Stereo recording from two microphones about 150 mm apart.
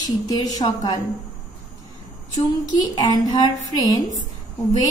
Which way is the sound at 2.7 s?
25° left (ahead or behind).